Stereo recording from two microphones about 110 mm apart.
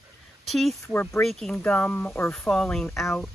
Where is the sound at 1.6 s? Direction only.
15° left (ahead or behind).